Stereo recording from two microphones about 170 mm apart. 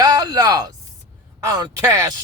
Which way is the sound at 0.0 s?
25° right (ahead or behind).